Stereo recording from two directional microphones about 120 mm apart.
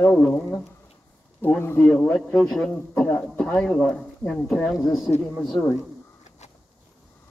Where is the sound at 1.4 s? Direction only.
20° left (ahead or behind).